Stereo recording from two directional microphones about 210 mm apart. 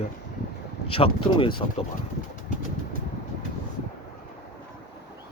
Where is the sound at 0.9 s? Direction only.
25° left (ahead or behind).